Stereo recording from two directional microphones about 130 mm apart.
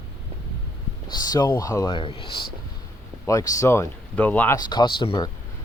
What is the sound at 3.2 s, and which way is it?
Speech, 25° left (ahead or behind).